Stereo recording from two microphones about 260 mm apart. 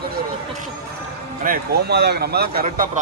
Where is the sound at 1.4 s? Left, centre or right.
Right.